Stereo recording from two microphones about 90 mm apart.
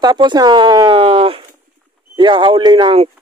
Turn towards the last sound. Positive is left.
turn(degrees=-75)  # may be behind; listen again after turning